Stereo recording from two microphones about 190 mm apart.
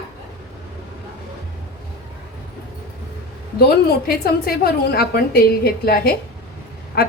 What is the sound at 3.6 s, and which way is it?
A woman's voice, 55° left (ahead or behind).